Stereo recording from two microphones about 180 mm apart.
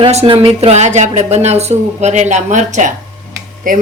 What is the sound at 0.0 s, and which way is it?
A woman's voice, 35° right (ahead or behind).